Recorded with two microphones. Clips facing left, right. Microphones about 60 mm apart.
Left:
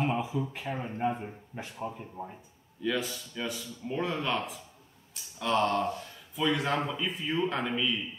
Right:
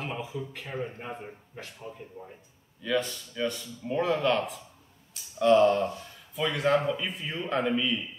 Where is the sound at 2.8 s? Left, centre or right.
Centre.